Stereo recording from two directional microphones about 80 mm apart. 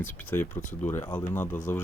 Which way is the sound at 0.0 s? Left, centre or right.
Left.